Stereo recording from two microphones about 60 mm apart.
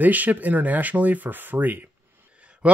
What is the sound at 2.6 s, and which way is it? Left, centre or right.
Speech, right.